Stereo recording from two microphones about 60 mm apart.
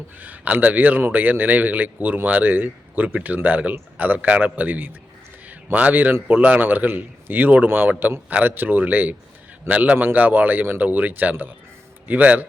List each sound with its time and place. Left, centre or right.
0.2 s a man's voice: right